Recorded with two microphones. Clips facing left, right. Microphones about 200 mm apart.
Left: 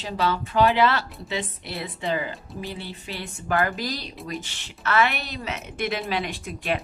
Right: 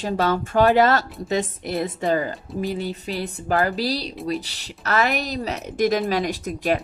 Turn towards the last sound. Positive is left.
turn(degrees=-40)  # may be behind; listen again after turning